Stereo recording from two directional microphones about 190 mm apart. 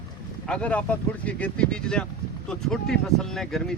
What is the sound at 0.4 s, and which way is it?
Speech, 5° left (ahead or behind).